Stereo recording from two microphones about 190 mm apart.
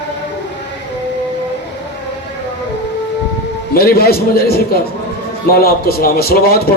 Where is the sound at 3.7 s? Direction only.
55° left (ahead or behind).